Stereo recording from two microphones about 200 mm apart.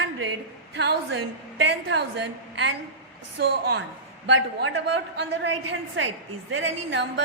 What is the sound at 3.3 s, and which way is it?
A woman's voice, 60° right (ahead or behind).